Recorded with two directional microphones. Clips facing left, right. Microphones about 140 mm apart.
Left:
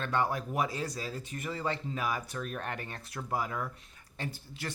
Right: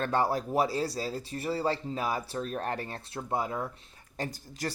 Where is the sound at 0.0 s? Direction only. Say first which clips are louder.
Right 3 dB; 35° right (ahead or behind).